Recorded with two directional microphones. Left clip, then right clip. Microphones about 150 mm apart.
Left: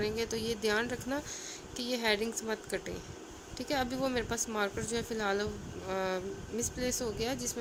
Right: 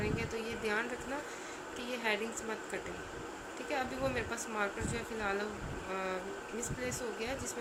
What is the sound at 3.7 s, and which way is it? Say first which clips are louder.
A woman's voice: left 3 dB; 85° left.